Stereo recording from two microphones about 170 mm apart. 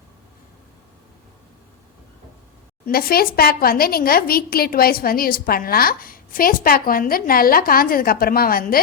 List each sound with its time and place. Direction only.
2.8 s a woman's voice: 60° left (ahead or behind)